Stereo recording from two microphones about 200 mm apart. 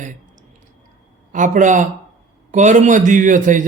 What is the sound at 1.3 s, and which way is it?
Speech, 40° right (ahead or behind).